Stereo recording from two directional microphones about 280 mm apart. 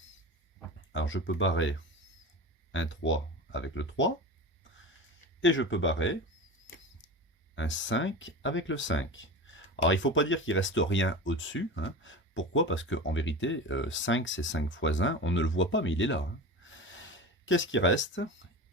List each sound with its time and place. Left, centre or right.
0.9 s speech: left
2.7 s speech: left
5.4 s speech: left
7.5 s speech: left
16.6 s a sound: left